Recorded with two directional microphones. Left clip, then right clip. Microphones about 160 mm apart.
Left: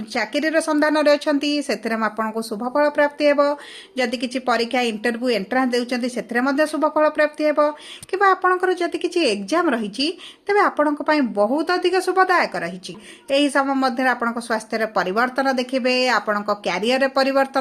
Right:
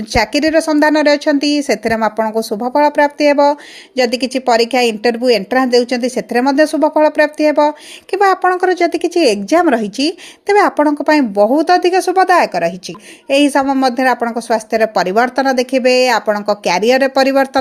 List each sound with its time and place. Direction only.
0.1 s a woman's voice: 45° right (ahead or behind)